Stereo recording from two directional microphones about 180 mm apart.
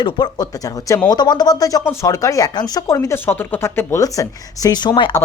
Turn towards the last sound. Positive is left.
turn(degrees=25)  # may be behind; listen again after turning